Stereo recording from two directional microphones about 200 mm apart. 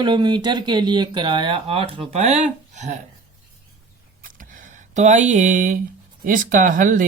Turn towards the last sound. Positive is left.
turn(degrees=-40)  # may be behind; listen again after turning